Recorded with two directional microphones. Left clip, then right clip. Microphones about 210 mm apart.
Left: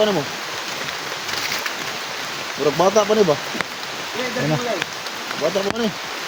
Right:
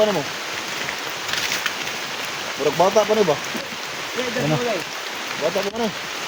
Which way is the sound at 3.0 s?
55° left (ahead or behind).